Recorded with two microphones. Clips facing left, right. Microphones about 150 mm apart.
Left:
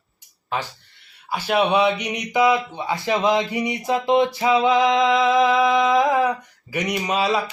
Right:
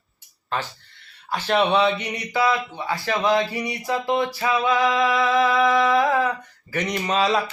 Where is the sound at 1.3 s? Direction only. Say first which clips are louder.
Left 1 dB; 10° left (ahead or behind).